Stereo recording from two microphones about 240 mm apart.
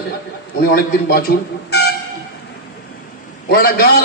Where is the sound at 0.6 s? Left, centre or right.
Left.